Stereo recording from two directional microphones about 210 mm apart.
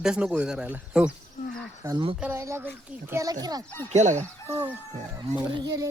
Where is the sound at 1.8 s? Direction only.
20° right (ahead or behind).